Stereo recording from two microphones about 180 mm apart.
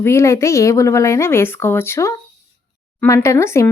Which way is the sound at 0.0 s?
15° left (ahead or behind).